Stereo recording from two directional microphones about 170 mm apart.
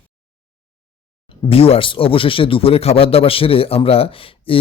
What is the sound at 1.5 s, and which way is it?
Speech, 35° left (ahead or behind).